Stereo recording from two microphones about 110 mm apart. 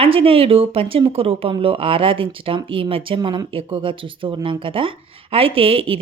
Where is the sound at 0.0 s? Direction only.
55° right (ahead or behind).